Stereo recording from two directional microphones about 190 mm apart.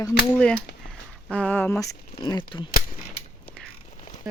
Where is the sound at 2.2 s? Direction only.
25° left (ahead or behind).